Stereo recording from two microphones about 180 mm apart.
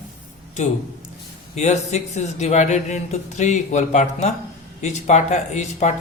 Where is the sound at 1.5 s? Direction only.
40° left (ahead or behind).